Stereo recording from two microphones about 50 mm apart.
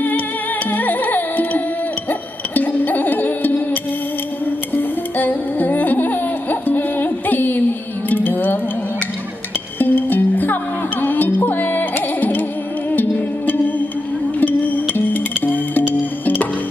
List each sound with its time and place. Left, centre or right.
0.7 s music: left
4.7 s music: left
9.8 s music: left